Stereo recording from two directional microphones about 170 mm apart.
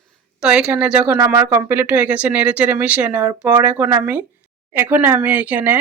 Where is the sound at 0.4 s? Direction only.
5° right (ahead or behind).